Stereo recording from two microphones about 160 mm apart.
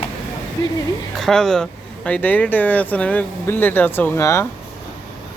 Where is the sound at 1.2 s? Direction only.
5° left (ahead or behind).